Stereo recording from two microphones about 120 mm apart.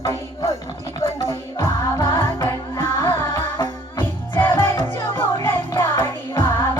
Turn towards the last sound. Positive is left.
turn(degrees=20)  # may be behind; listen again after turning